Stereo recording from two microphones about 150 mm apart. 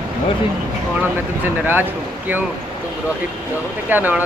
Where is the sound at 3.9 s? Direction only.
10° right (ahead or behind).